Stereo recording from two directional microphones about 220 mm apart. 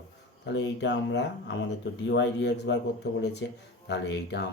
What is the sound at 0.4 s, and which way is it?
Speech, 55° left (ahead or behind).